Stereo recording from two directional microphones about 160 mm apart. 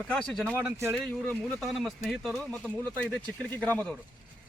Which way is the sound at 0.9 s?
5° left (ahead or behind).